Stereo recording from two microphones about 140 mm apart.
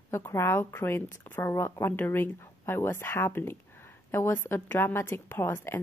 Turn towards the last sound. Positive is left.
turn(degrees=15)  # may be behind; listen again after turning